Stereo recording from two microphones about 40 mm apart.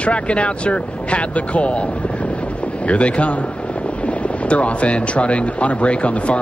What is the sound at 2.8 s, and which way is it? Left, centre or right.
Speech, left.